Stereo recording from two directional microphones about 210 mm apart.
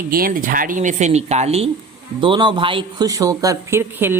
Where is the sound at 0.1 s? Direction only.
45° right (ahead or behind).